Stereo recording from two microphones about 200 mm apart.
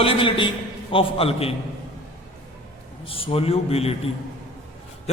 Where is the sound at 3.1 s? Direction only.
30° left (ahead or behind).